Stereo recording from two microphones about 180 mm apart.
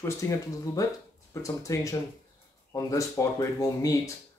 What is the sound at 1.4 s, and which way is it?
Speech, 15° left (ahead or behind).